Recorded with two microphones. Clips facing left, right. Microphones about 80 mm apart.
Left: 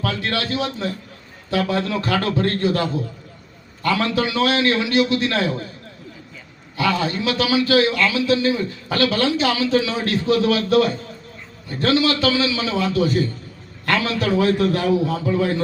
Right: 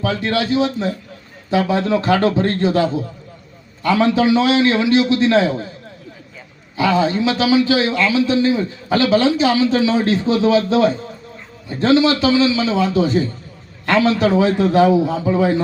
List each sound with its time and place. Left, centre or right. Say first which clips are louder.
0.0 s a man's voice: right 5 dB; centre
6.7 s a man's voice: right 5 dB; right